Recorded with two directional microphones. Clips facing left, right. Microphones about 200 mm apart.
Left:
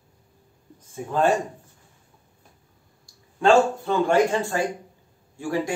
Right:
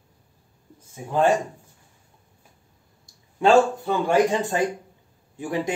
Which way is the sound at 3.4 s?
15° right (ahead or behind).